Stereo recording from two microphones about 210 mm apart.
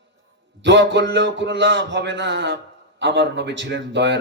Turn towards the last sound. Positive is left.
turn(degrees=-55)  # may be behind; listen again after turning